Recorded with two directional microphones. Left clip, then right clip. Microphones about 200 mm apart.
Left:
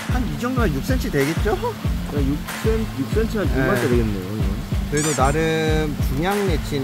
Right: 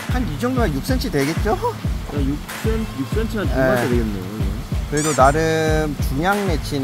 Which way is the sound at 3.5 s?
5° right (ahead or behind).